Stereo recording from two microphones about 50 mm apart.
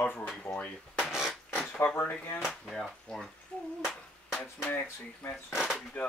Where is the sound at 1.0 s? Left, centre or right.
Centre.